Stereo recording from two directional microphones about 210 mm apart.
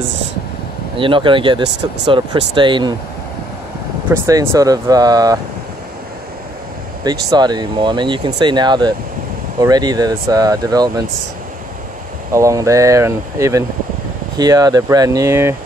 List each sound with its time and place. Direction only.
0.9 s speech: 25° right (ahead or behind)
4.1 s speech: 15° right (ahead or behind)
7.1 s speech: 20° right (ahead or behind)
12.3 s speech: 15° right (ahead or behind)